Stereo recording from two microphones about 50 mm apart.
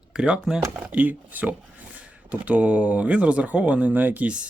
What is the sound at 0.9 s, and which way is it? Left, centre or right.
Speech, right.